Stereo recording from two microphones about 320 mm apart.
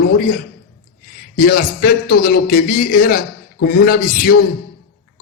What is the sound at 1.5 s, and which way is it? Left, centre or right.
Speech, left.